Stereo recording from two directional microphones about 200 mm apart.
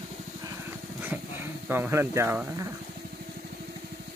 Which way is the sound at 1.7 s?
10° right (ahead or behind).